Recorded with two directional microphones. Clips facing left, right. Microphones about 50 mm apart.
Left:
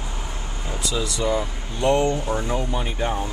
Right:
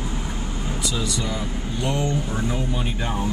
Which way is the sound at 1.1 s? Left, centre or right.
Left.